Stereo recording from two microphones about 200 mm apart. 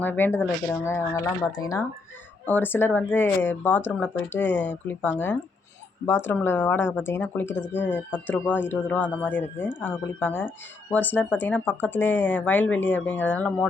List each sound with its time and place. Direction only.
0.0 s speech: 10° left (ahead or behind)